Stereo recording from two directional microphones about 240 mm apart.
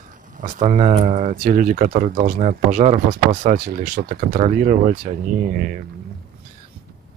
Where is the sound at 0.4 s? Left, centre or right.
Right.